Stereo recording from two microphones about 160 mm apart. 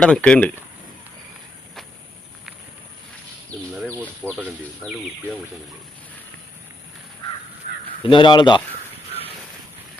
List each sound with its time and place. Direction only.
0.0 s speech: 5° left (ahead or behind)
4.2 s speech: 10° right (ahead or behind)
7.6 s caw: 60° left (ahead or behind)
8.0 s a man's voice: 30° left (ahead or behind)